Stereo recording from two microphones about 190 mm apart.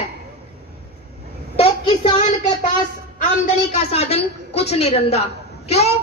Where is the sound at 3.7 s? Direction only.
35° left (ahead or behind).